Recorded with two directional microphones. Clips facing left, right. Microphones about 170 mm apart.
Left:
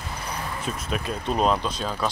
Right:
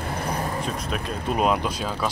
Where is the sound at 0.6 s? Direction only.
5° left (ahead or behind).